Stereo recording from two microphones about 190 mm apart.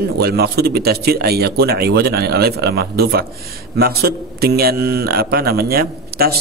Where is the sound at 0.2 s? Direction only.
55° right (ahead or behind).